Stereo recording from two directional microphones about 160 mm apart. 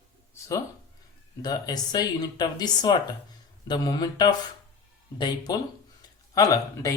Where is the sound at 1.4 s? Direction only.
25° left (ahead or behind).